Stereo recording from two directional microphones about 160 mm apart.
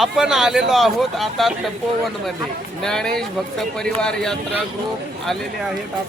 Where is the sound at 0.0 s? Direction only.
Centre (ahead or behind).